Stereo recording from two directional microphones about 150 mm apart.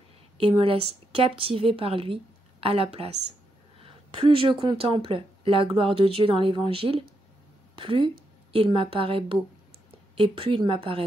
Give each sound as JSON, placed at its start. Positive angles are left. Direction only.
{"t": 0.4, "sound": "a woman's voice", "side_deg": -40}